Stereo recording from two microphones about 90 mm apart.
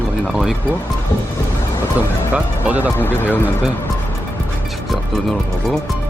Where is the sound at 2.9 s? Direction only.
20° left (ahead or behind).